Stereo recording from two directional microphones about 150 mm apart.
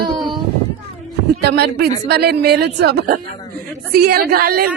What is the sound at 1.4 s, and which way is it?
Speech, 90° right.